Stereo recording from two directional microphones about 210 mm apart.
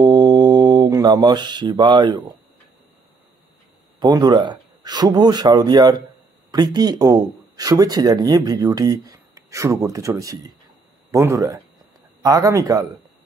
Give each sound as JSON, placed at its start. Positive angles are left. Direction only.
{"t": 0.0, "sound": "mantra", "side_deg": -20}
{"t": 4.0, "sound": "speech", "side_deg": -20}